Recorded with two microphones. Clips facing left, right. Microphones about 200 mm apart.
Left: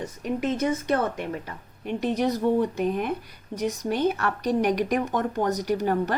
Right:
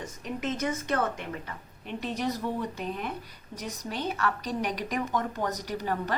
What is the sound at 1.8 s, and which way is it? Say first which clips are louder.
A woman's voice: left 7 dB; 50° left (ahead or behind).